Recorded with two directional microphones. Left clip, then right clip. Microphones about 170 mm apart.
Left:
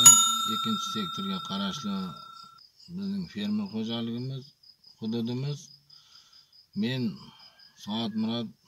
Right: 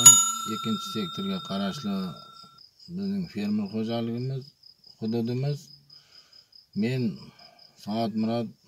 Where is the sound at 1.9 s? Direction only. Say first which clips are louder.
Right 2 dB; 5° right (ahead or behind).